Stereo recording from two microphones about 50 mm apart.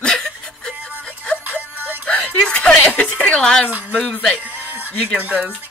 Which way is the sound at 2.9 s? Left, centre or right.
Left.